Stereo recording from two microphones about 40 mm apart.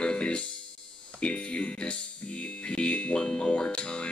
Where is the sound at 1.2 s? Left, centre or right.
Left.